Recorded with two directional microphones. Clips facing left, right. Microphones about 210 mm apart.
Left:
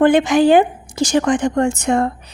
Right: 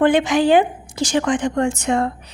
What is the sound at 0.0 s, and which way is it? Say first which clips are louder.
A woman's voice: left 3 dB; 45° left (ahead or behind).